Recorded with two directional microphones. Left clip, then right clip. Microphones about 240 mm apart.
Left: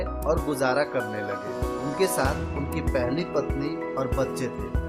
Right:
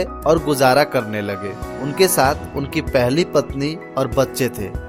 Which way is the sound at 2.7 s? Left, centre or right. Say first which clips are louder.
Right 10 dB; right.